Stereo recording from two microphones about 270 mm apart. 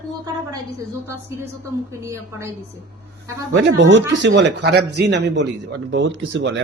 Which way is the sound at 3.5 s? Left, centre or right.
Right.